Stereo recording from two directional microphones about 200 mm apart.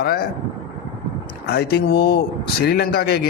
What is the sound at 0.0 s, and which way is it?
Speech, 50° left (ahead or behind).